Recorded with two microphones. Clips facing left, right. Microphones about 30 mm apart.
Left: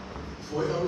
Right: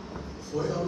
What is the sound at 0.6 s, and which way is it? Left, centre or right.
Speech, left.